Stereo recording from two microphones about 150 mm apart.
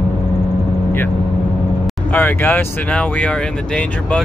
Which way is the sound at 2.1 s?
10° left (ahead or behind).